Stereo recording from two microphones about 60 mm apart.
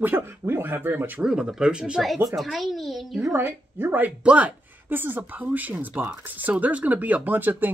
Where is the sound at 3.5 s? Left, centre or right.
Right.